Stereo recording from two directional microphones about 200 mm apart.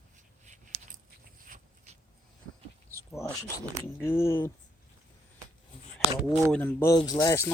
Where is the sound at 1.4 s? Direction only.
40° right (ahead or behind).